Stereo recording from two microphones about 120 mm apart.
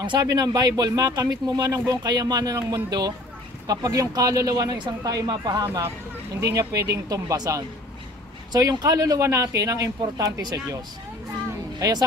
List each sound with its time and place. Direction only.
0.0 s speech: 35° right (ahead or behind)